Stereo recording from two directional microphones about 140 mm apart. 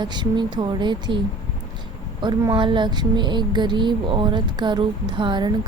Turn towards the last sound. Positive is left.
turn(degrees=-35)  # may be behind; listen again after turning